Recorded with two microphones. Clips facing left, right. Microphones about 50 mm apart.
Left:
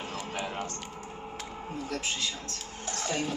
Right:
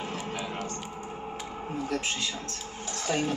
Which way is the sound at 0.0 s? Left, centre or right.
Right.